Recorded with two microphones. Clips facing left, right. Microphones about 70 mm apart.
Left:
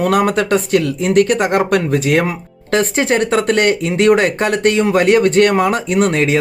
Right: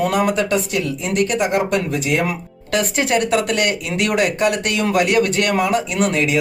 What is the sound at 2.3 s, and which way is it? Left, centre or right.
Speech, left.